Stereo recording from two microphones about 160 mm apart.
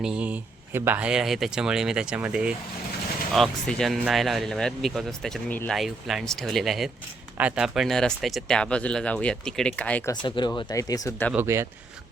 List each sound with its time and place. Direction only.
0.0 s speech: 5° right (ahead or behind)
10.1 s speech: 30° left (ahead or behind)
11.3 s speech: 15° right (ahead or behind)